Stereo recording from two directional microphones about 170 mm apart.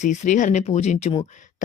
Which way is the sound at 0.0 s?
45° left (ahead or behind).